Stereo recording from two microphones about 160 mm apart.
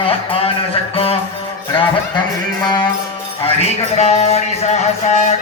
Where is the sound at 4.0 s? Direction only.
40° left (ahead or behind).